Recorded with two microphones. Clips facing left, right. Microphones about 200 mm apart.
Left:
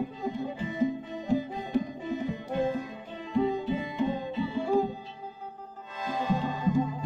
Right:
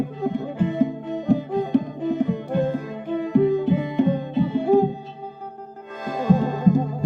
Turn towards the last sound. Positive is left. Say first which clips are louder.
# right 7 dB
turn(degrees=-45)  # may be behind; listen again after turning